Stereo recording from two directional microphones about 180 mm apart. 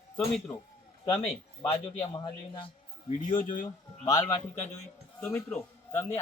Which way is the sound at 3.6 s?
15° left (ahead or behind).